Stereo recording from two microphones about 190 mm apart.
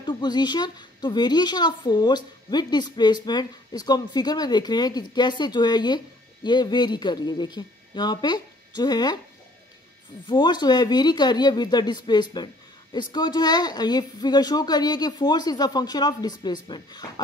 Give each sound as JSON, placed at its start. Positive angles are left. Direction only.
{"t": 0.0, "sound": "speech", "side_deg": 25}
{"t": 10.2, "sound": "speech", "side_deg": 25}